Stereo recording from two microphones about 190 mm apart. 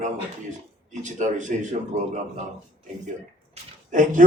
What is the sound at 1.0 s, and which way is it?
Speech, 40° right (ahead or behind).